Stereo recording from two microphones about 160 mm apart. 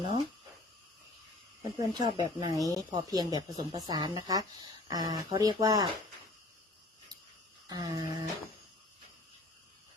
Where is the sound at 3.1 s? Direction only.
25° right (ahead or behind).